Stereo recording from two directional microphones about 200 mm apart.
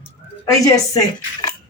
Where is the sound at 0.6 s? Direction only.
20° left (ahead or behind).